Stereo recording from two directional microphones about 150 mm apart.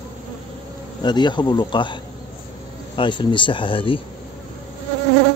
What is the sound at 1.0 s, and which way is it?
Speech, 30° left (ahead or behind).